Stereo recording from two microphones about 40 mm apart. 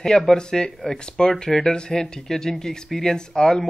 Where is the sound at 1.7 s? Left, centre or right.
Left.